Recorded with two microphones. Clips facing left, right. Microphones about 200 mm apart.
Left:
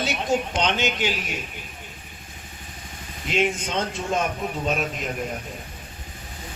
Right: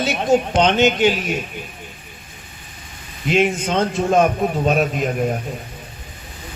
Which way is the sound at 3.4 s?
60° right (ahead or behind).